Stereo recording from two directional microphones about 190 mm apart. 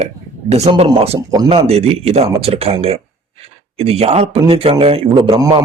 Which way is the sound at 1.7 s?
35° right (ahead or behind).